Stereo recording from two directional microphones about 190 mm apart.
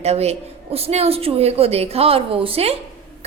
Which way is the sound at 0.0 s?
35° right (ahead or behind).